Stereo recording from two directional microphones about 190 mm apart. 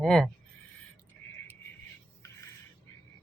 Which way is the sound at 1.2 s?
5° left (ahead or behind).